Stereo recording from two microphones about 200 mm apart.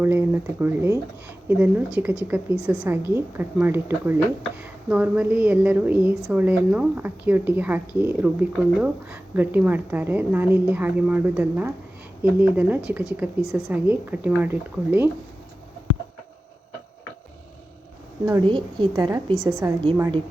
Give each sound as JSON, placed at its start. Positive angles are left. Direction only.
{"t": 0.0, "sound": "speech", "side_deg": -10}
{"t": 18.3, "sound": "a woman's voice", "side_deg": -20}
{"t": 20.0, "sound": "a woman's voice", "side_deg": -25}